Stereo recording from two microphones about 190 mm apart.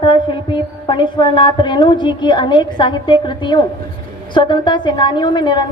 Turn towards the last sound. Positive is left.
turn(degrees=25)  # may be behind; listen again after turning